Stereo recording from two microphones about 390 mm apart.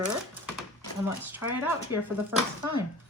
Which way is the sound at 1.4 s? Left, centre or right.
Left.